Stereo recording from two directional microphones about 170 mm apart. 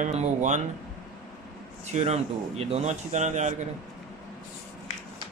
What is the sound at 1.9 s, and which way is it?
Speech, 40° right (ahead or behind).